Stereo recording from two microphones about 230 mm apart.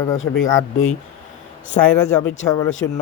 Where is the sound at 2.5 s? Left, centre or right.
Centre.